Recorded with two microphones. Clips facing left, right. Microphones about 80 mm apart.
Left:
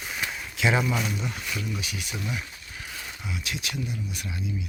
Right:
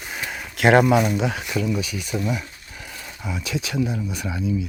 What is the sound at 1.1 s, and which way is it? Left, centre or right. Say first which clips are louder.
Speech: right 10 dB; right.